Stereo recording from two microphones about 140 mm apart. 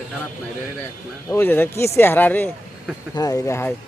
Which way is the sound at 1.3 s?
15° left (ahead or behind).